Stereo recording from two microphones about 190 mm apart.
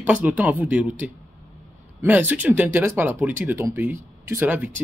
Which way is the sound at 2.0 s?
10° right (ahead or behind).